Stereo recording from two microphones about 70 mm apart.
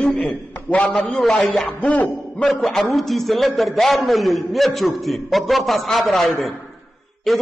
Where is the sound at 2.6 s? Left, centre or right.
Centre.